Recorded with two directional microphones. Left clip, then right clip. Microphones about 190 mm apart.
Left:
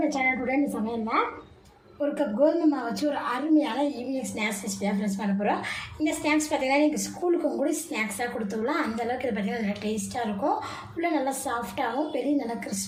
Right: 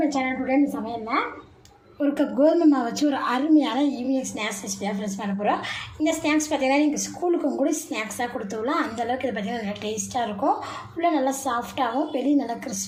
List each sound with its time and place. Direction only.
0.0 s a woman's voice: 15° right (ahead or behind)
2.0 s a woman's voice: 45° right (ahead or behind)
4.1 s a woman's voice: 15° right (ahead or behind)
11.0 s a woman's voice: 20° right (ahead or behind)